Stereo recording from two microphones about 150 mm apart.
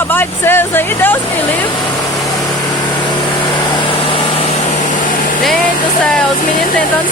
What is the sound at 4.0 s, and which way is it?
Vehicle, 40° left (ahead or behind).